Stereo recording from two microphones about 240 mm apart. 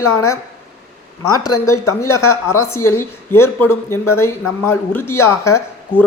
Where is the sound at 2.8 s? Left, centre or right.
Centre.